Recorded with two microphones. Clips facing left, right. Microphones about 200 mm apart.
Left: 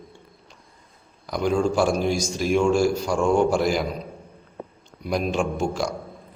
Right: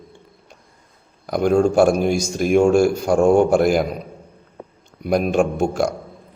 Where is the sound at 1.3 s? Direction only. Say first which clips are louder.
Right 6 dB; 50° right (ahead or behind).